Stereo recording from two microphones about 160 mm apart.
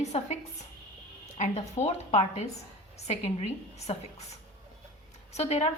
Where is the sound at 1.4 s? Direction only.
45° left (ahead or behind).